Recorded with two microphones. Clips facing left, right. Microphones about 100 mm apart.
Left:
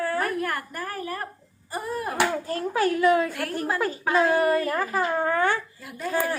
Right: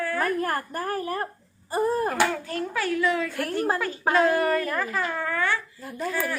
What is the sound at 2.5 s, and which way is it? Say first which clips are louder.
Speech: left 3 dB; 35° left (ahead or behind).